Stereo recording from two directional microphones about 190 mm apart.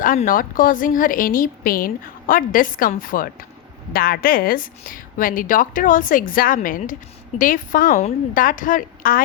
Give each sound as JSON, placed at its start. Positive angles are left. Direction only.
{"t": 0.0, "sound": "a woman's voice", "side_deg": 45}